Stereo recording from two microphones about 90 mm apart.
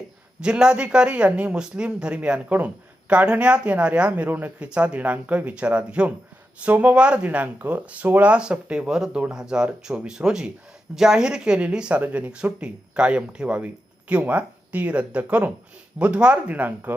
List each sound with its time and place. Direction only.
0.4 s speech: 10° right (ahead or behind)